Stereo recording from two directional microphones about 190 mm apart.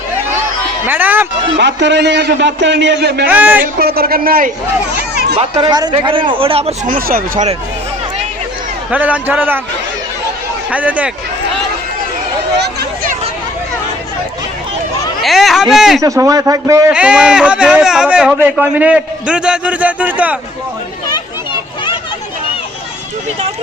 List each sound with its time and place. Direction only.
0.9 s speech: 10° right (ahead or behind)
1.5 s a man's voice: 65° right (ahead or behind)
3.2 s a man's voice: 10° right (ahead or behind)
3.6 s a man's voice: 55° right (ahead or behind)
5.4 s speech: 25° right (ahead or behind)
6.9 s a man's voice: 45° right (ahead or behind)
8.9 s a man's voice: 10° right (ahead or behind)
10.7 s a man's voice: 10° right (ahead or behind)
12.5 s a sound: 60° right (ahead or behind)
15.2 s speech: centre (ahead or behind)
16.0 s a man's voice: 15° right (ahead or behind)
16.9 s a man's voice: 5° right (ahead or behind)